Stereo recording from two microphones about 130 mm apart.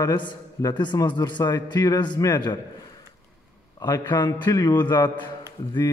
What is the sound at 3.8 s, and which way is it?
A man's voice, 35° left (ahead or behind).